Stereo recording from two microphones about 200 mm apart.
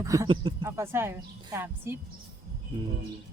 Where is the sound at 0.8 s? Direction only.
10° right (ahead or behind).